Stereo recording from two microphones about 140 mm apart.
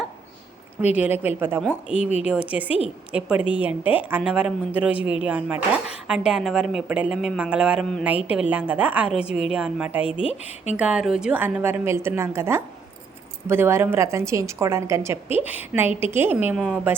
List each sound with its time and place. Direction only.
0.9 s a woman's voice: 10° right (ahead or behind)